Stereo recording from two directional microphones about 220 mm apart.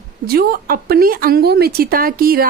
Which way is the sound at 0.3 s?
45° right (ahead or behind).